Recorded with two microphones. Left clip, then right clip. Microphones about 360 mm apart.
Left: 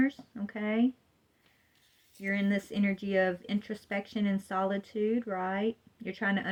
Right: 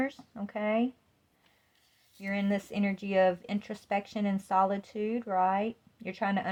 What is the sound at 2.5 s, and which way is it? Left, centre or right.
Speech, right.